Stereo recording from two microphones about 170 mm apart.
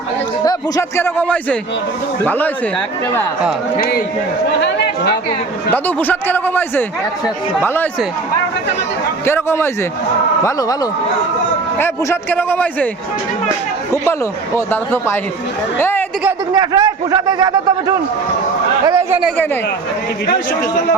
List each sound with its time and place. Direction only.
0.4 s speech: 15° left (ahead or behind)
5.7 s speech: 10° left (ahead or behind)
9.2 s a man's voice: 15° left (ahead or behind)
11.8 s speech: 10° left (ahead or behind)
13.9 s speech: 15° left (ahead or behind)
15.8 s chatter: 15° left (ahead or behind)
16.5 s a man's voice: 25° right (ahead or behind)